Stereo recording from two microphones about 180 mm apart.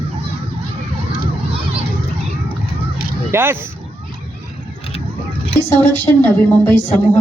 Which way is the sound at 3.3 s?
15° right (ahead or behind).